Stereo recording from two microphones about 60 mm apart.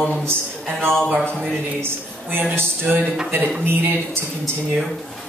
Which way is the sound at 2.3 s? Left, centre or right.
Right.